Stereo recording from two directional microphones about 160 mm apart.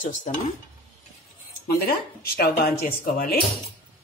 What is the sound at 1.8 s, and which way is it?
Speech, 70° left (ahead or behind).